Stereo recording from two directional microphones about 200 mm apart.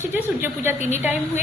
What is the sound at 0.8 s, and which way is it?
Speech, 35° left (ahead or behind).